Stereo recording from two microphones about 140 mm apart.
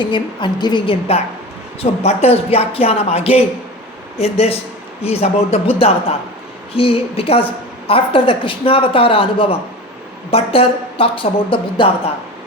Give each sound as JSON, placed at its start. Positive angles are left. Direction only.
{"t": 0.0, "sound": "a woman's voice", "side_deg": 35}